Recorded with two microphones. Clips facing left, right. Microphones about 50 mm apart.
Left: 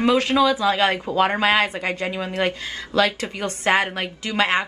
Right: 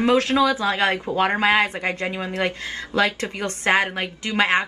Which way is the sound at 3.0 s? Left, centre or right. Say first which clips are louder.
Left 1 dB; right.